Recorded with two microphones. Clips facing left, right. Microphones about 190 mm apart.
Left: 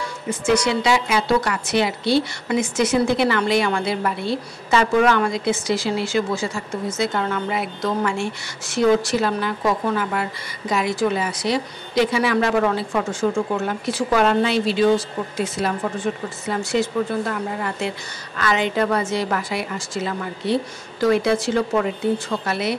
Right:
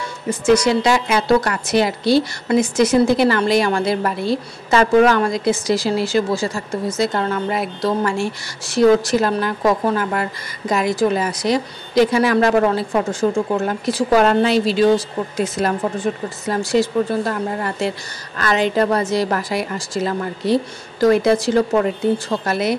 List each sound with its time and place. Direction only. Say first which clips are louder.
0.3 s a woman's voice: right 5 dB; 40° right (ahead or behind)